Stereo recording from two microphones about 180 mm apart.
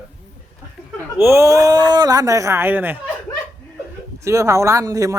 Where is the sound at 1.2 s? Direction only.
15° right (ahead or behind).